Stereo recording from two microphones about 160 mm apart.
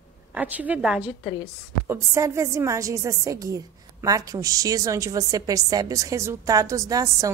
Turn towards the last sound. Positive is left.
turn(degrees=-20)  # may be behind; listen again after turning